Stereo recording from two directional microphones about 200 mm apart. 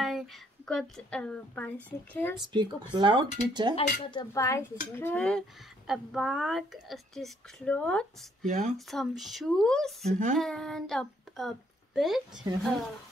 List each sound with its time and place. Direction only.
0.7 s a woman's voice: centre (ahead or behind)
2.5 s speech: 20° right (ahead or behind)
3.7 s a woman's voice: 25° left (ahead or behind); by 8.5 s 5° left (ahead or behind)
8.5 s speech: 40° right (ahead or behind)
8.7 s speech: centre (ahead or behind)
10.0 s speech: 40° right (ahead or behind)
10.3 s speech: 5° left (ahead or behind)